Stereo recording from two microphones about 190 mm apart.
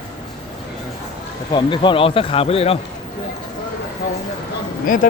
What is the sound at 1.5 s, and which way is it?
Speech, 25° left (ahead or behind).